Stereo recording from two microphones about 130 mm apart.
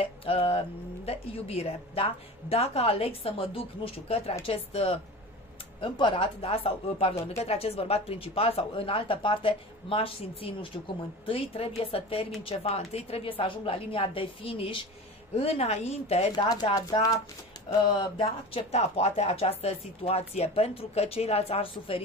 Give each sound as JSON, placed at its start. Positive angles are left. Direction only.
{"t": 0.0, "sound": "music", "side_deg": 45}
{"t": 1.0, "sound": "speech", "side_deg": 50}
{"t": 15.3, "sound": "speech", "side_deg": 50}
{"t": 16.7, "sound": "speech", "side_deg": 25}
{"t": 17.8, "sound": "speech", "side_deg": 40}